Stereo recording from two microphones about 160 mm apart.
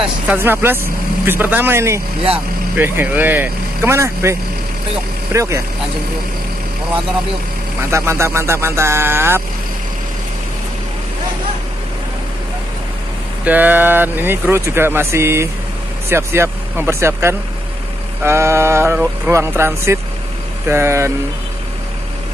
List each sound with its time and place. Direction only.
0.0 s speech: 10° right (ahead or behind)
7.9 s speech: 15° right (ahead or behind)
13.4 s speech: 10° right (ahead or behind)